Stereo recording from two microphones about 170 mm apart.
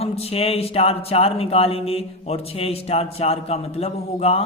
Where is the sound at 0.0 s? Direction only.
35° left (ahead or behind).